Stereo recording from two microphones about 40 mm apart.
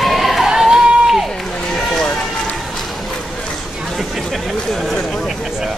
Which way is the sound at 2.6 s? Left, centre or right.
Centre.